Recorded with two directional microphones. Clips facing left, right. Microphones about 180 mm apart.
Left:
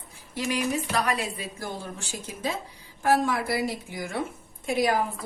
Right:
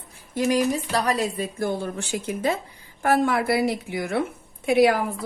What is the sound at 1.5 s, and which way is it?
A woman's voice, 60° right (ahead or behind).